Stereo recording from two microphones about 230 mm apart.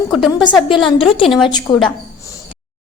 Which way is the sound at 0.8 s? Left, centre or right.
Left.